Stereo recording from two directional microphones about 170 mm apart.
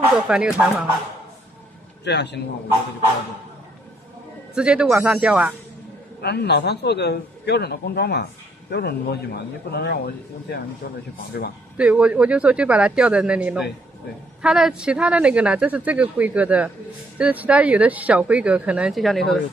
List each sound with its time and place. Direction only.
0.1 s speech: 5° right (ahead or behind)
2.0 s a man's voice: 90° left
4.6 s speech: 5° right (ahead or behind)
6.2 s a man's voice: 75° left (ahead or behind)
11.7 s speech: 5° right (ahead or behind)